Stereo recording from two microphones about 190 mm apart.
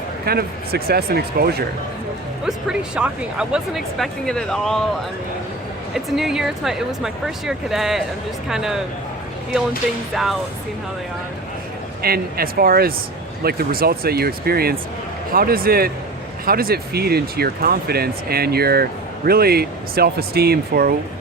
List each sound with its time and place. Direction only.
0.3 s speech: 55° right (ahead or behind)
2.4 s speech: 5° right (ahead or behind)
5.9 s speech: centre (ahead or behind)
12.0 s speech: 50° right (ahead or behind)